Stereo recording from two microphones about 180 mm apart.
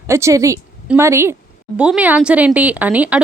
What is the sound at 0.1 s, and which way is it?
A woman's voice, 15° right (ahead or behind).